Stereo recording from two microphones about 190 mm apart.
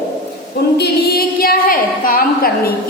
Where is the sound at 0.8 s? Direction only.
55° left (ahead or behind).